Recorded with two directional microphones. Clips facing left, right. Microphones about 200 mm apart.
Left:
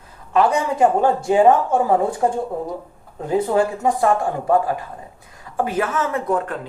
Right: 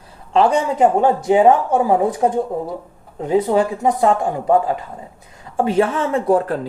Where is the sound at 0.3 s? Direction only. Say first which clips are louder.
Right 2 dB; 25° right (ahead or behind).